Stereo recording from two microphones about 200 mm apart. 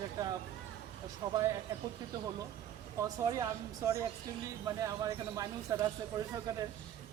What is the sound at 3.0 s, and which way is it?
Speech, 15° right (ahead or behind).